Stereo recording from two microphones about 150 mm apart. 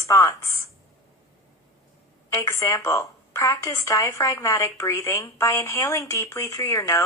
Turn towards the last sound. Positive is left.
turn(degrees=20)  # may be behind; listen again after turning